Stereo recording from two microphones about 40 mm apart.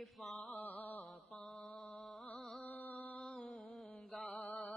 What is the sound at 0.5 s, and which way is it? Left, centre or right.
Music, left.